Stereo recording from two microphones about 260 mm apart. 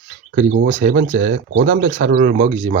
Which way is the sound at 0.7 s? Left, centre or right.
Right.